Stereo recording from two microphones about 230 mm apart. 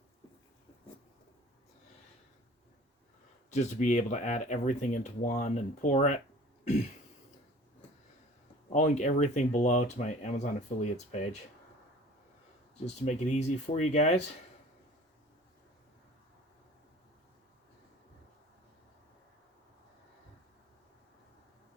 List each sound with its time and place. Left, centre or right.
3.5 s speech: left
8.7 s speech: left
12.8 s speech: left